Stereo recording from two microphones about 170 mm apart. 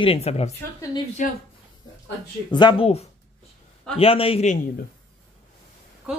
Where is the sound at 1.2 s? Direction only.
50° left (ahead or behind).